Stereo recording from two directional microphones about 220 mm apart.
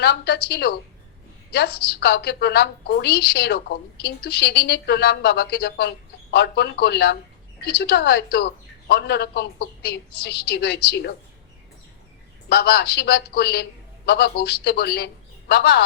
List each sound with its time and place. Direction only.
0.0 s a woman's voice: 50° left (ahead or behind)
12.5 s a woman's voice: 45° left (ahead or behind)